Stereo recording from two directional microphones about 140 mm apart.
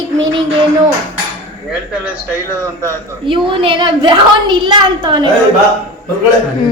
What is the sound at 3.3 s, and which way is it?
A woman's voice, 35° right (ahead or behind).